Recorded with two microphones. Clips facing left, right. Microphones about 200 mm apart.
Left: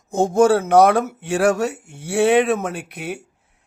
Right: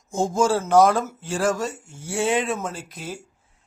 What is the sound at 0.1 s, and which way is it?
Speech, 60° left (ahead or behind).